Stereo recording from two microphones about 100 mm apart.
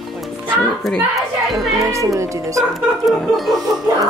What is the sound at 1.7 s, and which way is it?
Speech, 30° right (ahead or behind).